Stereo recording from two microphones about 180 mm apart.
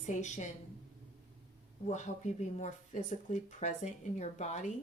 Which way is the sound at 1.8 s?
40° left (ahead or behind).